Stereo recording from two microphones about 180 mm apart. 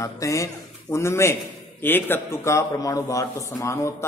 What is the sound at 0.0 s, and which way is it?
A man's voice, 15° left (ahead or behind).